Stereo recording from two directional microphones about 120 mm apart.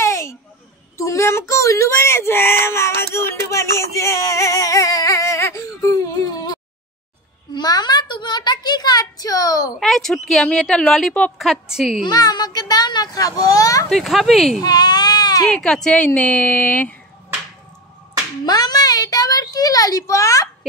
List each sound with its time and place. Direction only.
0.0 s a sound: 25° left (ahead or behind)
1.5 s speech: 25° left (ahead or behind)
3.0 s a sound: 20° left (ahead or behind)
7.5 s a child's voice: 35° left (ahead or behind)
9.8 s speech: 5° left (ahead or behind)
12.0 s a child's voice: 35° left (ahead or behind)
13.8 s speech: centre (ahead or behind)
14.6 s baby cry: 35° left (ahead or behind)
15.4 s a woman's voice: 5° left (ahead or behind)
18.4 s a sound: 35° left (ahead or behind)